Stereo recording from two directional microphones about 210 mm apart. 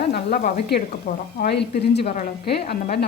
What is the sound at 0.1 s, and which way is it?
Frying, 45° left (ahead or behind).